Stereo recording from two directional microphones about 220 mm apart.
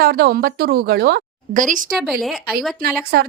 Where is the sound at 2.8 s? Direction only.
45° right (ahead or behind).